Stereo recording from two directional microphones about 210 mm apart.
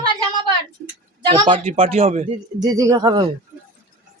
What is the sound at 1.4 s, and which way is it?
Speech, 25° right (ahead or behind).